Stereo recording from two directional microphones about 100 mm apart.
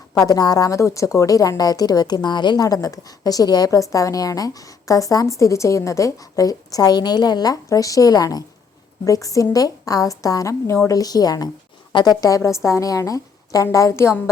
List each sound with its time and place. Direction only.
0.2 s a woman's voice: 40° left (ahead or behind)